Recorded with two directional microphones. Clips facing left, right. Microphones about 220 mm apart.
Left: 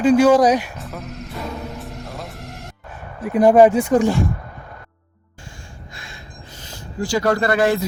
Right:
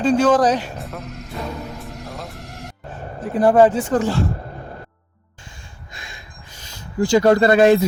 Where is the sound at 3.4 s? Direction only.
10° left (ahead or behind).